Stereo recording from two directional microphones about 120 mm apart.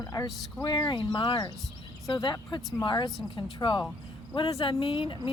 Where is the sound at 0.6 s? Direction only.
40° left (ahead or behind).